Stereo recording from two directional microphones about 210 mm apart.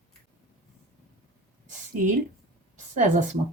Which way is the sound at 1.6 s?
35° right (ahead or behind).